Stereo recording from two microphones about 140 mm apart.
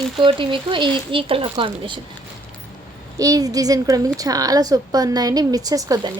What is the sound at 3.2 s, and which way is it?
A woman's voice, 25° right (ahead or behind).